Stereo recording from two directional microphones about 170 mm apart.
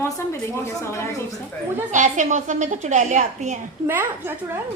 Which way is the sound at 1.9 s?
45° right (ahead or behind).